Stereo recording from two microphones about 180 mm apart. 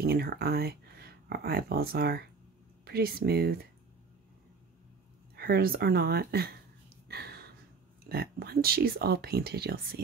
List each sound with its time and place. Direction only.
0.0 s speech: 60° right (ahead or behind)
5.3 s speech: 60° right (ahead or behind)
7.1 s a sound: 65° right (ahead or behind)
8.1 s speech: 60° right (ahead or behind)